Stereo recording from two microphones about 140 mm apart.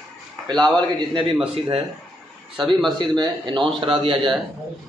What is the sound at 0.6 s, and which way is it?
Speech, 35° right (ahead or behind).